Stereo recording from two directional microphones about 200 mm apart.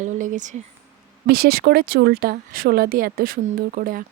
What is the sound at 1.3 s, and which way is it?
Speech, 50° right (ahead or behind).